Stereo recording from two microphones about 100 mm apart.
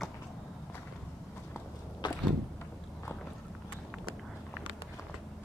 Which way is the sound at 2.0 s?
50° left (ahead or behind).